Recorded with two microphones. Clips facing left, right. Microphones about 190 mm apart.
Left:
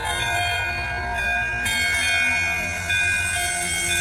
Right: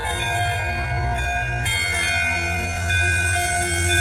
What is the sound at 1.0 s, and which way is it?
Music, 25° right (ahead or behind).